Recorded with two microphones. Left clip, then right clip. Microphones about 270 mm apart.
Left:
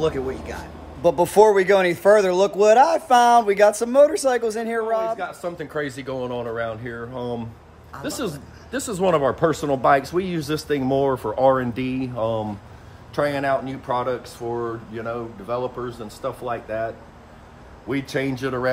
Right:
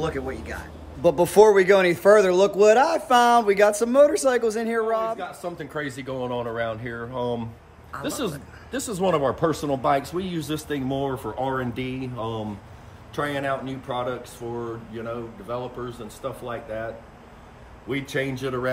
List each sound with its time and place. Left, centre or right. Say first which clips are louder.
0.0 s a man's voice: left 5 dB; centre; by 16.8 s left
17.8 s speech: left 2 dB; left